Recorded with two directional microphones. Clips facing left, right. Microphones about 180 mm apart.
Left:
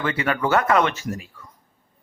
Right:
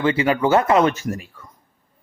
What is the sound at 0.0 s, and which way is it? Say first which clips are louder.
Speech: right 5 dB; 30° right (ahead or behind).